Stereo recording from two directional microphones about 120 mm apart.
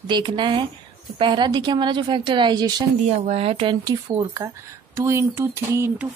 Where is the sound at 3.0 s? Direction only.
65° right (ahead or behind).